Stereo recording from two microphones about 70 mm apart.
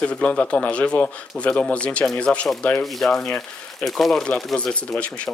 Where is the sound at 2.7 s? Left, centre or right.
Centre.